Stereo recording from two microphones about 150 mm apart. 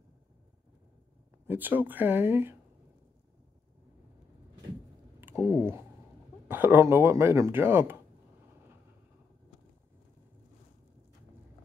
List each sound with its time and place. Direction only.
1.5 s speech: 10° right (ahead or behind)
5.4 s speech: 15° right (ahead or behind)